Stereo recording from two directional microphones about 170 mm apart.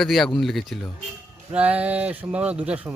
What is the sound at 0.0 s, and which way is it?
Speech, centre (ahead or behind).